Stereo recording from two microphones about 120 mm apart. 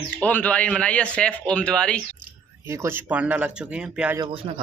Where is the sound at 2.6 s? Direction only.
20° right (ahead or behind).